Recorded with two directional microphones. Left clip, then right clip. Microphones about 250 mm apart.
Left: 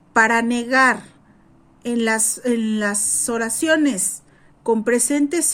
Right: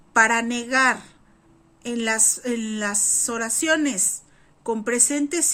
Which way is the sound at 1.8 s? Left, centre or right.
Centre.